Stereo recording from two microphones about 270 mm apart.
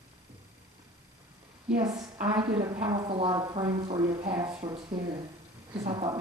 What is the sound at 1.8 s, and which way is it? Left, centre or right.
A woman's voice, centre.